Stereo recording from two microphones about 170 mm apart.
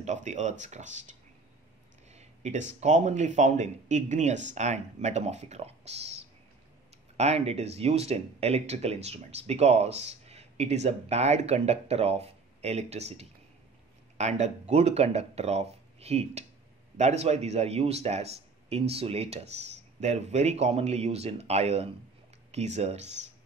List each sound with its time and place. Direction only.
0.0 s speech: 45° right (ahead or behind)
2.1 s speech: 40° right (ahead or behind)
7.2 s speech: 40° right (ahead or behind)